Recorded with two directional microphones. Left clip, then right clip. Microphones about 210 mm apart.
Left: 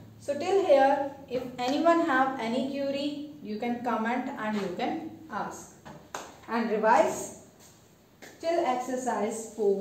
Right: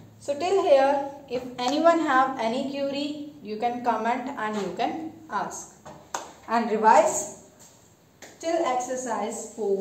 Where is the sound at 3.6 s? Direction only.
25° right (ahead or behind).